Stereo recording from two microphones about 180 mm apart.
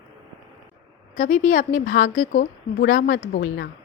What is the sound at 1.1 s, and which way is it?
A woman's voice, 40° left (ahead or behind).